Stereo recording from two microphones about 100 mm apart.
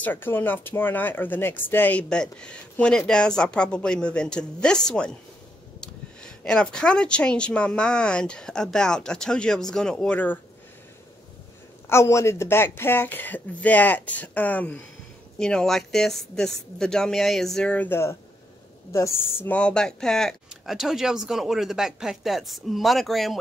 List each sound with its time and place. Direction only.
0.0 s speech: 20° left (ahead or behind)
11.9 s speech: 30° left (ahead or behind); by 17.7 s 5° left (ahead or behind)
17.7 s speech: 25° left (ahead or behind)
19.5 s speech: 10° left (ahead or behind)